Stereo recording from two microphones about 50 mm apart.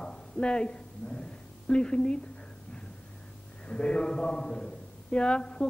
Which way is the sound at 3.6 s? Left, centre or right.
Centre.